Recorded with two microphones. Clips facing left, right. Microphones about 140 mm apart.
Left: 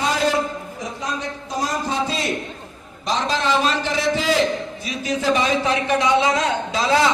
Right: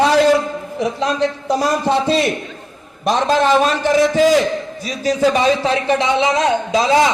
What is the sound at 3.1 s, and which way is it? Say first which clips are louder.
A man's voice: right 7 dB; 55° right (ahead or behind).